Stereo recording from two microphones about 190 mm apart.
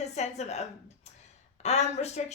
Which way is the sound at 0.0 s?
35° left (ahead or behind).